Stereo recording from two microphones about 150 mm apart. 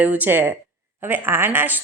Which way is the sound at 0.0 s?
10° right (ahead or behind).